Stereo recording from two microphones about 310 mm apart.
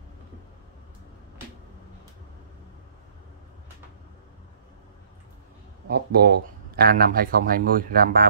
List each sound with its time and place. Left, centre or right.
5.9 s speech: right